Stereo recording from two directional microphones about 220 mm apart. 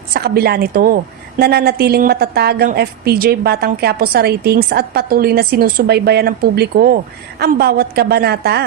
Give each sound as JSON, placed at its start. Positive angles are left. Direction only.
{"t": 0.1, "sound": "a woman's voice", "side_deg": -45}